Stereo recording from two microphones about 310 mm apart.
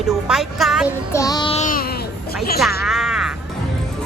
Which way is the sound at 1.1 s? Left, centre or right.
Centre.